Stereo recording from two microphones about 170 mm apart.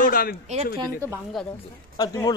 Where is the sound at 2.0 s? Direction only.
20° left (ahead or behind).